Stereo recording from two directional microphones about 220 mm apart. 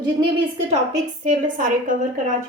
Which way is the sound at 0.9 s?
35° right (ahead or behind).